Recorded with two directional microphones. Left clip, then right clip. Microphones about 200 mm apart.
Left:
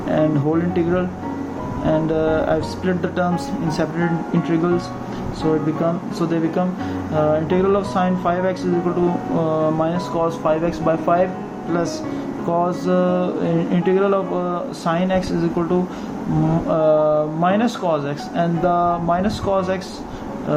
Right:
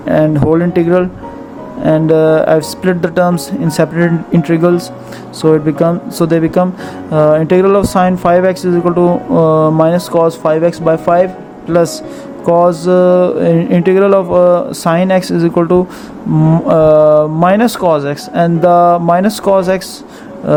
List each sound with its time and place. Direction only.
0.1 s music: 50° right (ahead or behind)
5.4 s speech: 55° right (ahead or behind)
7.2 s music: 55° right (ahead or behind)
12.5 s music: 50° right (ahead or behind)